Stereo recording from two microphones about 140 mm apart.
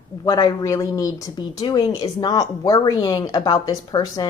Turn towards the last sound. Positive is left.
turn(degrees=30)  # may be behind; listen again after turning